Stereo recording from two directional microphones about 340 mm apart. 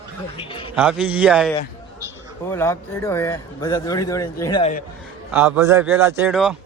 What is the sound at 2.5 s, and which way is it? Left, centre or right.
A man's voice, centre.